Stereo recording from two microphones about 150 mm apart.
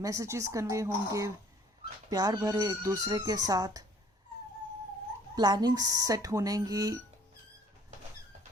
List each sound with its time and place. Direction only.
0.0 s speech: 20° right (ahead or behind)
5.3 s speech: 25° right (ahead or behind)